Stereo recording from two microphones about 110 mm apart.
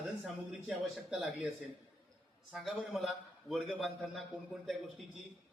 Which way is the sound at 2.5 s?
Centre (ahead or behind).